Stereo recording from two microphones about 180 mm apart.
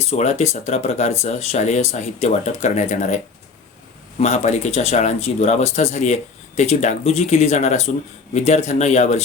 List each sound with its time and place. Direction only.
0.1 s speech: 40° left (ahead or behind)
4.2 s speech: 40° left (ahead or behind)